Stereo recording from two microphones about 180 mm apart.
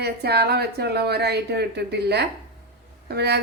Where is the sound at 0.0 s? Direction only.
60° right (ahead or behind).